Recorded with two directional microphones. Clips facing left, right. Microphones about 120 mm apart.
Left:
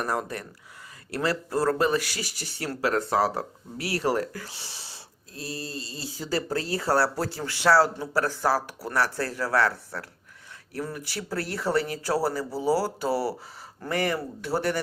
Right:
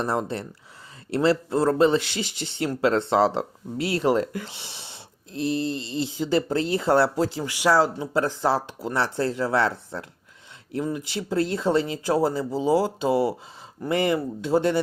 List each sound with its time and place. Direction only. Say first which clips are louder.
0.0 s speech: right 3 dB; 25° right (ahead or behind)